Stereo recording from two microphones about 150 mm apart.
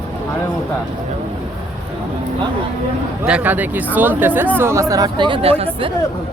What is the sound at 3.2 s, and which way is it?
Speech, 10° right (ahead or behind).